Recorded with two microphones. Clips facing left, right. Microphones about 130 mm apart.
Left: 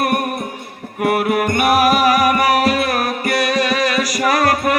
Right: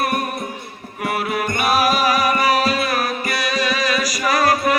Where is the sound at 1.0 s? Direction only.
60° left (ahead or behind).